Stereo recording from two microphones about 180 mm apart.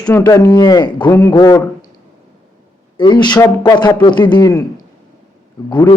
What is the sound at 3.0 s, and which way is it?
A man's voice, 25° left (ahead or behind).